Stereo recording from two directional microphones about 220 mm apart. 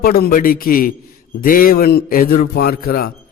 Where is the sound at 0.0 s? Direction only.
45° left (ahead or behind).